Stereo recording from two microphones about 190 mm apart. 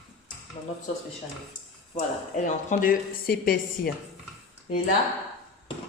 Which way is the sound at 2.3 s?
45° left (ahead or behind).